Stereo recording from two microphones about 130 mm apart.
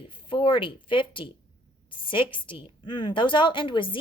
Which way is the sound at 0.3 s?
40° left (ahead or behind).